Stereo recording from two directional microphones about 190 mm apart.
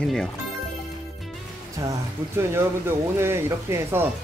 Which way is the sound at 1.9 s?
15° right (ahead or behind).